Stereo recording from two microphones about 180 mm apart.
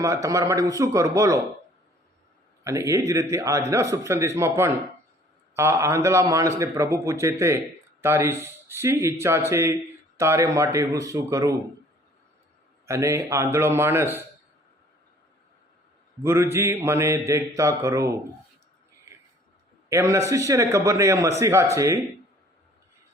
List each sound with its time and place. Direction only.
0.0 s a man's voice: 15° right (ahead or behind)
2.6 s a man's voice: 15° right (ahead or behind)
12.8 s a man's voice: 15° right (ahead or behind)
16.2 s a man's voice: 15° right (ahead or behind)
19.9 s a man's voice: 15° right (ahead or behind)